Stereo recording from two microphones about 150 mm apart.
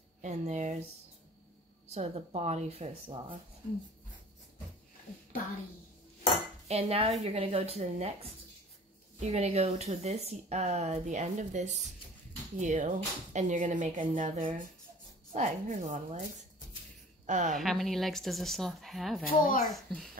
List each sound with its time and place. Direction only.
0.2 s speech: 50° right (ahead or behind)
1.9 s speech: 45° right (ahead or behind)
6.7 s a woman's voice: 40° right (ahead or behind)
17.6 s speech: centre (ahead or behind)
19.2 s speech: 70° left (ahead or behind)
19.7 s speech: centre (ahead or behind)